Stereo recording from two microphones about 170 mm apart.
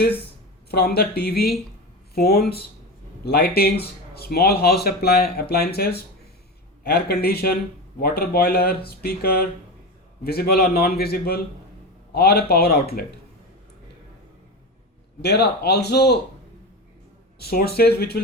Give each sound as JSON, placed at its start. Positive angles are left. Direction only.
{"t": 0.7, "sound": "a man's voice", "side_deg": 70}
{"t": 15.2, "sound": "a man's voice", "side_deg": 75}
{"t": 17.4, "sound": "a man's voice", "side_deg": 65}